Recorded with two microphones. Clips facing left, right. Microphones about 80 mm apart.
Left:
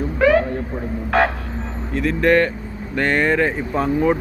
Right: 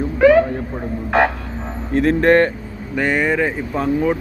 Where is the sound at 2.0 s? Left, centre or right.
Right.